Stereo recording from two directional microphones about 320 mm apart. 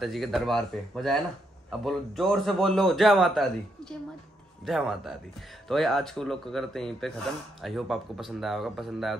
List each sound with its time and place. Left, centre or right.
0.0 s a man's voice: centre
4.6 s a man's voice: centre